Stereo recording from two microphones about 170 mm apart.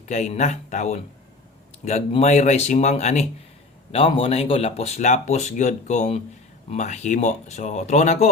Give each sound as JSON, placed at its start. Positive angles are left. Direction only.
{"t": 0.0, "sound": "speech", "side_deg": 45}